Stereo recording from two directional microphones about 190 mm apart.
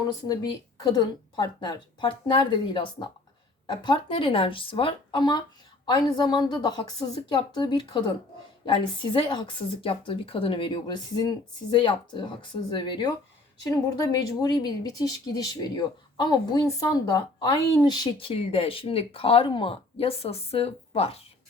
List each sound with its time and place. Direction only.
0.3 s speech: 20° left (ahead or behind)